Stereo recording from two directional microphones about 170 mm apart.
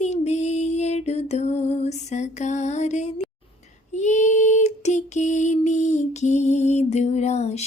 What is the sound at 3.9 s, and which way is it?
Female singing, 45° left (ahead or behind).